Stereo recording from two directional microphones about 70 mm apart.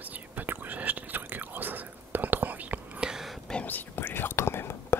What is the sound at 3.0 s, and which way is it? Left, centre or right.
Whispering, centre.